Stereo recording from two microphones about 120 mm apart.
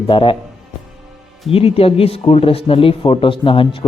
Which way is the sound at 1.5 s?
50° left (ahead or behind).